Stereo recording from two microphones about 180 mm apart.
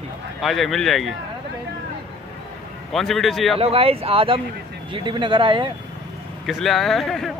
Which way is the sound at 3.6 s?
35° right (ahead or behind).